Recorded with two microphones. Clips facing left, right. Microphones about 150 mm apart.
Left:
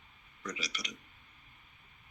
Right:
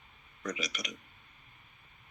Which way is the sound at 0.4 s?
50° right (ahead or behind).